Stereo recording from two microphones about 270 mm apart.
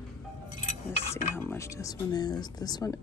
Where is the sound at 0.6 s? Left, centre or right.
Left.